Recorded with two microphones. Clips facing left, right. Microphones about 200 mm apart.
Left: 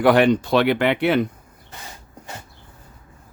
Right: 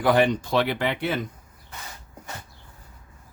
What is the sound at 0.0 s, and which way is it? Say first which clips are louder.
Speech: left 5 dB; 70° left (ahead or behind).